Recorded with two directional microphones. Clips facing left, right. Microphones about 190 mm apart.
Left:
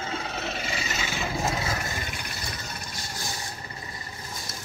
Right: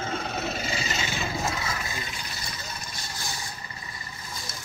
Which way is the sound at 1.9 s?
55° left (ahead or behind).